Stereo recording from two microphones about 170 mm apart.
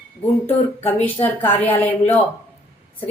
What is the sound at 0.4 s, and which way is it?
A woman's voice, 10° left (ahead or behind).